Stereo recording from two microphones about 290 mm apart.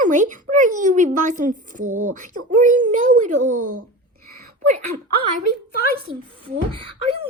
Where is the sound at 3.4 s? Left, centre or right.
Right.